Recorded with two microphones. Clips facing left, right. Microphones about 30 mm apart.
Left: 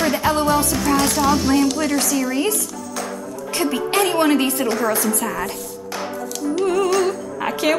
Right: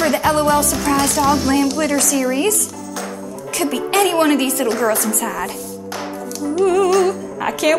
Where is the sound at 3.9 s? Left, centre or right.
Right.